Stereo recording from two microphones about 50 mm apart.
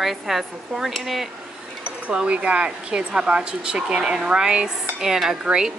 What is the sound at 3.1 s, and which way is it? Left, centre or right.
Dishes, centre.